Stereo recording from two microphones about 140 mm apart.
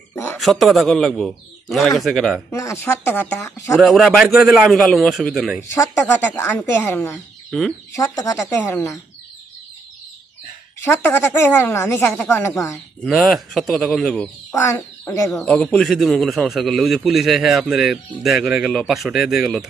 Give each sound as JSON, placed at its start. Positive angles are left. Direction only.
{"t": 0.1, "sound": "a sound", "side_deg": 20}
{"t": 0.4, "sound": "a man's voice", "side_deg": 0}
{"t": 2.5, "sound": "speech", "side_deg": 20}
{"t": 3.7, "sound": "a man's voice", "side_deg": 0}
{"t": 5.8, "sound": "speech", "side_deg": 20}
{"t": 8.5, "sound": "speech", "side_deg": 15}
{"t": 10.8, "sound": "speech", "side_deg": 15}
{"t": 13.0, "sound": "a man's voice", "side_deg": 0}
{"t": 14.6, "sound": "speech", "side_deg": 20}
{"t": 15.3, "sound": "a man's voice", "side_deg": 0}